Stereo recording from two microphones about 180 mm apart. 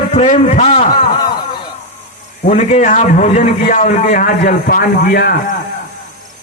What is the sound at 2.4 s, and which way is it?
A man's voice, 40° left (ahead or behind).